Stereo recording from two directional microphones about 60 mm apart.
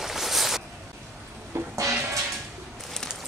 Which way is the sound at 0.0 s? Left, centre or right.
Centre.